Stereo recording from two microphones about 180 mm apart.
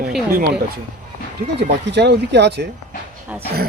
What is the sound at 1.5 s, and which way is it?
Speech, 70° right (ahead or behind).